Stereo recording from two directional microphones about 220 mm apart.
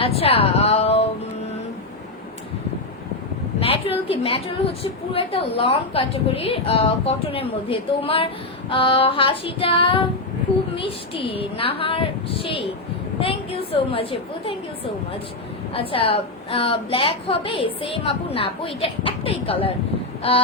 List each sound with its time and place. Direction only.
0.0 s speech: 25° left (ahead or behind)
3.6 s a woman's voice: 25° left (ahead or behind)
15.7 s a woman's voice: 25° left (ahead or behind)